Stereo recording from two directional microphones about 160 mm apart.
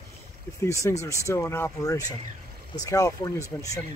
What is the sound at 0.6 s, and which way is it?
Speech, 20° left (ahead or behind).